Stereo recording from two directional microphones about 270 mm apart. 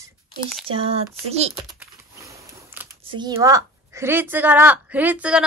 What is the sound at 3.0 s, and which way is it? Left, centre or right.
A woman's voice, centre.